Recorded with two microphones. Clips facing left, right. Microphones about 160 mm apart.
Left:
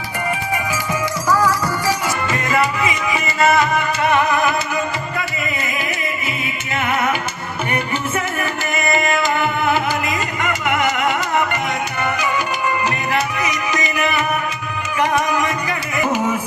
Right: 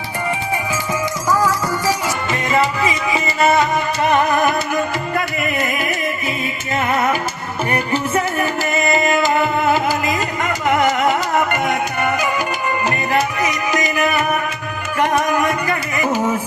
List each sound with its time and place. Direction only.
1.9 s music: 25° right (ahead or behind)
4.1 s music: 45° right (ahead or behind)